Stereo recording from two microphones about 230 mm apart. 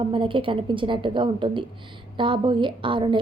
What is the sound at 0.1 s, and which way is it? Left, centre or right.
A woman's voice, right.